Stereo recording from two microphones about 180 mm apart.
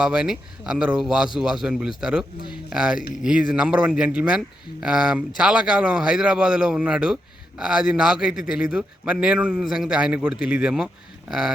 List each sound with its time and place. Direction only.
0.0 s a man's voice: 5° right (ahead or behind)